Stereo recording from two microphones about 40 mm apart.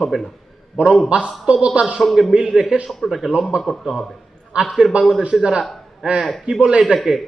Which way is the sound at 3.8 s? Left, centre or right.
Centre.